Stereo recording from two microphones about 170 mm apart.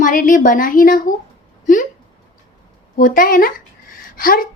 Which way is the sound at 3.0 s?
55° left (ahead or behind).